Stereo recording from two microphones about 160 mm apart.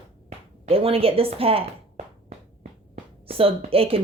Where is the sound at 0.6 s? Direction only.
35° right (ahead or behind).